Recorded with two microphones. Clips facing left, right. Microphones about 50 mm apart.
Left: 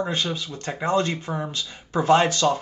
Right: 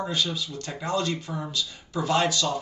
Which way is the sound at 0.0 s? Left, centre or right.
Left.